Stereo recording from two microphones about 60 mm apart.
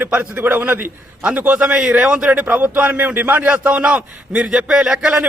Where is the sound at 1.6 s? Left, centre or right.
Centre.